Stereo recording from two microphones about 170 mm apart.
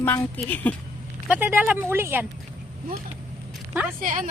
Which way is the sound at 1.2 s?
10° right (ahead or behind).